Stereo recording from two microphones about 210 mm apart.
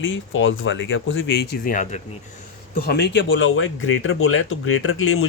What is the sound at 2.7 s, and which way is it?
Speech, 50° left (ahead or behind).